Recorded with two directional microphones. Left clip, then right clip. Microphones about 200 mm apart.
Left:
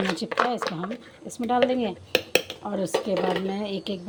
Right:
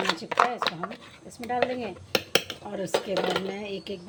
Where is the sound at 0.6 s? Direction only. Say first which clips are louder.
Right 1 dB; 20° right (ahead or behind).